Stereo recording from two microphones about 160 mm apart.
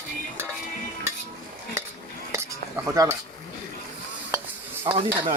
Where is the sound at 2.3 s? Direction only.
20° right (ahead or behind).